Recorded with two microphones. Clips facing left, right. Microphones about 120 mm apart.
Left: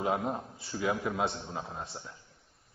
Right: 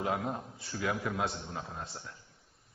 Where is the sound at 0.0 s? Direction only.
20° left (ahead or behind).